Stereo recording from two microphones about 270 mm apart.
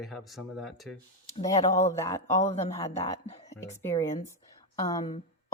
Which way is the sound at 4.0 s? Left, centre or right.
Centre.